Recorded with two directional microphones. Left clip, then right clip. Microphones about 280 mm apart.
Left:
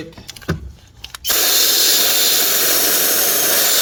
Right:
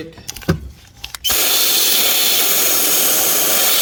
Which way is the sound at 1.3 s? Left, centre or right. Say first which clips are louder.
Left 1 dB; centre.